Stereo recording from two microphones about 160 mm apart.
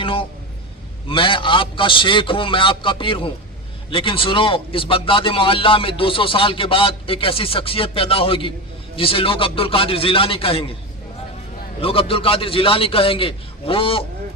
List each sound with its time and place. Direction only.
0.0 s a sound: 35° left (ahead or behind)
1.0 s a man's voice: 35° left (ahead or behind)
11.8 s a man's voice: 35° left (ahead or behind)